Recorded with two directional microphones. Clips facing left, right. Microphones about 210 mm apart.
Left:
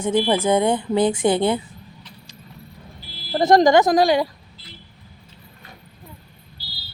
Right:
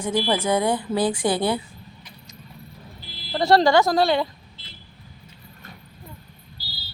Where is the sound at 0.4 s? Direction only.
25° left (ahead or behind).